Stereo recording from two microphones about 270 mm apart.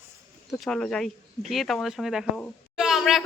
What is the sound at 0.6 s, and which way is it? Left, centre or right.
Speech, centre.